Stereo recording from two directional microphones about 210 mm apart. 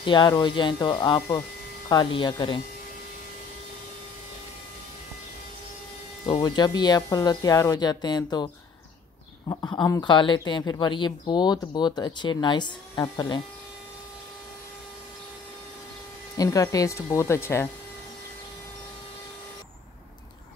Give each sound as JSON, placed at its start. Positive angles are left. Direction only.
{"t": 0.0, "sound": "speech", "side_deg": 20}
{"t": 6.4, "sound": "speech", "side_deg": 20}
{"t": 9.5, "sound": "speech", "side_deg": 20}
{"t": 16.3, "sound": "speech", "side_deg": 15}